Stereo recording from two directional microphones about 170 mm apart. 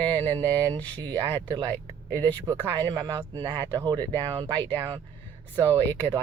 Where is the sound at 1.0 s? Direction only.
25° right (ahead or behind).